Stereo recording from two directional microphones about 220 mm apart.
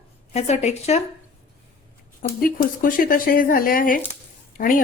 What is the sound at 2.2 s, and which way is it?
Speech, 40° left (ahead or behind).